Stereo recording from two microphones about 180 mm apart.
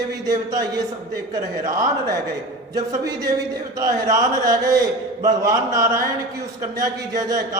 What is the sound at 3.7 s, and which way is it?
A man's voice, 20° right (ahead or behind).